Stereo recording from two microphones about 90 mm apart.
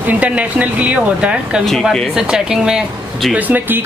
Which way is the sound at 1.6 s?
5° left (ahead or behind).